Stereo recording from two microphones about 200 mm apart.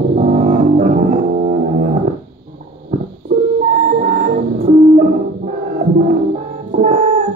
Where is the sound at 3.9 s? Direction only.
40° right (ahead or behind).